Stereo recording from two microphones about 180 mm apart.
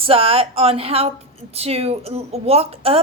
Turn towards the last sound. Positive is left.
turn(degrees=-35)  # may be behind; listen again after turning